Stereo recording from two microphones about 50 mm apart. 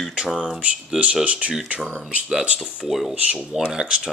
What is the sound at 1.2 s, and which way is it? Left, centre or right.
Speech, right.